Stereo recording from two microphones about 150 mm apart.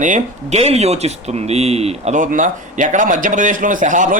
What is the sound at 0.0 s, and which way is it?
Speech, 50° right (ahead or behind).